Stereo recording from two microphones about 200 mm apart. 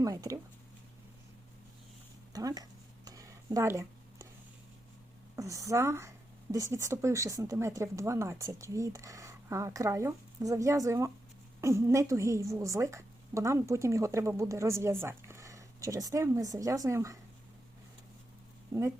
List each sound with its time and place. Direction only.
0.0 s a woman's voice: 15° right (ahead or behind)
2.3 s a sound: 20° right (ahead or behind)
5.4 s a woman's voice: 15° right (ahead or behind)
18.7 s a woman's voice: 15° right (ahead or behind)